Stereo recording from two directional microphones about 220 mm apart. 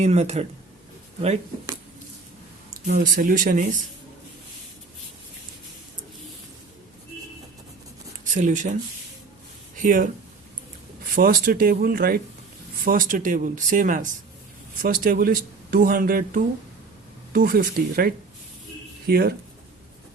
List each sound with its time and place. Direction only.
0.0 s speech: 30° right (ahead or behind)
2.8 s speech: 40° right (ahead or behind)
8.2 s speech: 35° right (ahead or behind)
9.7 s speech: 35° right (ahead or behind)
11.1 s speech: 40° right (ahead or behind)